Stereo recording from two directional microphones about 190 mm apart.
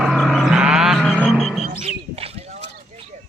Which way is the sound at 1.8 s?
35° right (ahead or behind).